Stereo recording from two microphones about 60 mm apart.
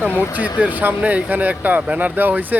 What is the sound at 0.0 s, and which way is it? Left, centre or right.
Speech, right.